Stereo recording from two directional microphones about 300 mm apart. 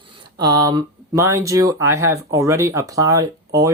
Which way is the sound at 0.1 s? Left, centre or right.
Centre.